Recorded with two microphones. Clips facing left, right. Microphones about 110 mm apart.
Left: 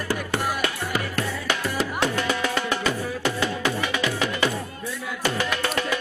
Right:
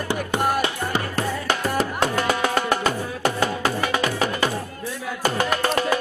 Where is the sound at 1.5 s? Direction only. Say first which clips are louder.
Right 3 dB; 40° right (ahead or behind).